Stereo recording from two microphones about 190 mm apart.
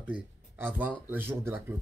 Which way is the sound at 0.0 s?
10° right (ahead or behind).